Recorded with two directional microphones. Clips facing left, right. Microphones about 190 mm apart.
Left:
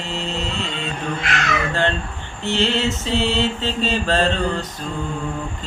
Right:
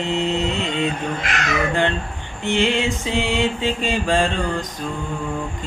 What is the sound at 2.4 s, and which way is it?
Mantra, 15° right (ahead or behind).